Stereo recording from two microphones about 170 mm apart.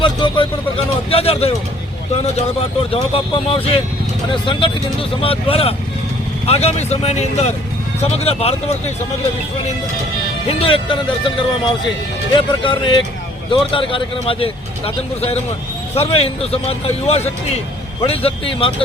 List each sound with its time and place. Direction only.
0.0 s vehicle: 30° left (ahead or behind)
1.1 s speech: 35° left (ahead or behind)
2.9 s speech: 35° left (ahead or behind)
10.4 s speech: 35° left (ahead or behind)